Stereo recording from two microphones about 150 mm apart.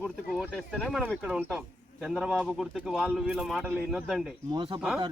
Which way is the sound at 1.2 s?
5° right (ahead or behind).